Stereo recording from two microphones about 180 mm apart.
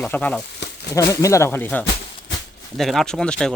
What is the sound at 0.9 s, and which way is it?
Speech, 20° left (ahead or behind).